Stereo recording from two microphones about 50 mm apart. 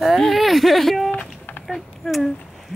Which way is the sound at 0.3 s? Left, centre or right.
Centre.